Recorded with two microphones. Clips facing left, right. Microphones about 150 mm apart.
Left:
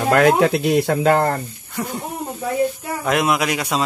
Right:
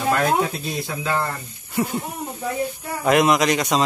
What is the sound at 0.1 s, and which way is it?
Speech, 75° left (ahead or behind).